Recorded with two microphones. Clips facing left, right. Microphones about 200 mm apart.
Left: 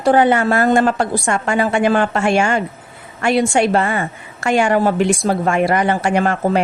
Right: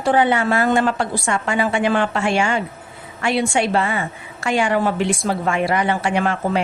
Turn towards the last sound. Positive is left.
turn(degrees=45)  # may be behind; listen again after turning